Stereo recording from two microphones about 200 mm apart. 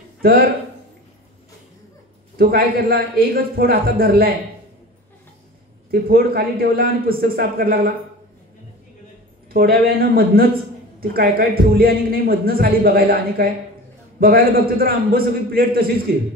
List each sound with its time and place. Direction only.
0.2 s speech: 50° right (ahead or behind)
2.3 s a man's voice: 50° right (ahead or behind)
5.9 s a man's voice: 50° right (ahead or behind)
9.5 s a man's voice: 50° right (ahead or behind)